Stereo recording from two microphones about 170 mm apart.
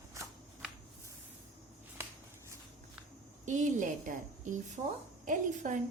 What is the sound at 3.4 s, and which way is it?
A woman's voice, 45° right (ahead or behind).